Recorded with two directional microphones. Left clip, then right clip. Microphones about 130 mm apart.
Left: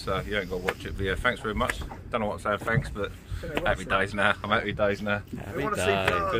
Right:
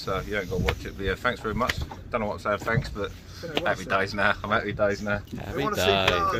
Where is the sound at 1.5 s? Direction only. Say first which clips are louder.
Right 1 dB; 10° left (ahead or behind).